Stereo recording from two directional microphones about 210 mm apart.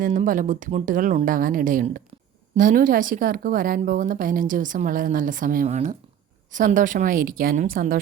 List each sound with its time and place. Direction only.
0.0 s speech: 40° right (ahead or behind)